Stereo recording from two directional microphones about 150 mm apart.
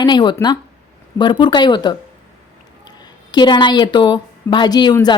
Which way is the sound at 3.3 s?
30° left (ahead or behind).